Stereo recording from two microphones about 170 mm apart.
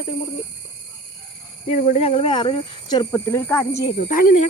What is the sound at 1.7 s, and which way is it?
Speech, 50° left (ahead or behind).